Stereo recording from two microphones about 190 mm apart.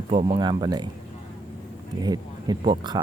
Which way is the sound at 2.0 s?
20° right (ahead or behind).